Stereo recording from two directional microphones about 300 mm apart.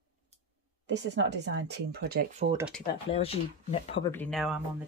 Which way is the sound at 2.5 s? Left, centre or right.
Centre.